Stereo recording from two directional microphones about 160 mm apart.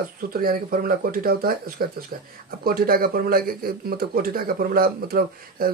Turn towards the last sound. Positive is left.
turn(degrees=-65)  # may be behind; listen again after turning